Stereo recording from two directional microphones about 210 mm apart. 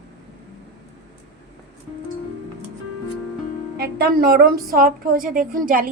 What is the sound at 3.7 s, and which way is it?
A woman's voice, 50° right (ahead or behind).